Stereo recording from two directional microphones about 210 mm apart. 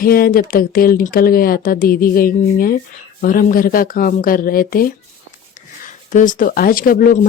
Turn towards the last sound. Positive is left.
turn(degrees=45)  # may be behind; listen again after turning